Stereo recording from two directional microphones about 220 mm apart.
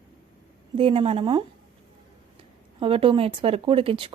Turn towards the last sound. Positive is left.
turn(degrees=-25)  # may be behind; listen again after turning